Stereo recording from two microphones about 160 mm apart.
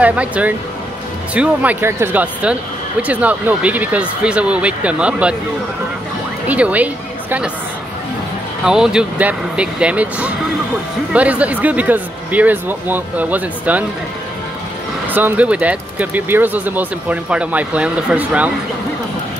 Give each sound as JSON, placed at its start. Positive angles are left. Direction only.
{"t": 0.0, "sound": "speech", "side_deg": -10}
{"t": 6.4, "sound": "a woman's voice", "side_deg": -10}
{"t": 8.6, "sound": "speech", "side_deg": -5}
{"t": 15.0, "sound": "speech", "side_deg": -10}